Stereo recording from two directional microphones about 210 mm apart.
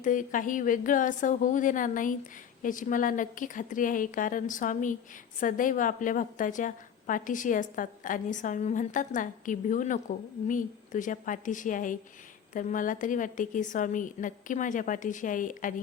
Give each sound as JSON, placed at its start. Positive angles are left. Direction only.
{"t": 0.0, "sound": "a woman's voice", "side_deg": 40}